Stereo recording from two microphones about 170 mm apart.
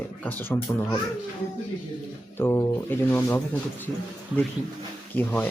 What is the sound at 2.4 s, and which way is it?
Speech, 15° left (ahead or behind).